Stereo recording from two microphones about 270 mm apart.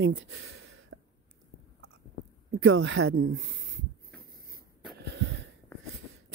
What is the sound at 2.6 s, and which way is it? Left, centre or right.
Speech, right.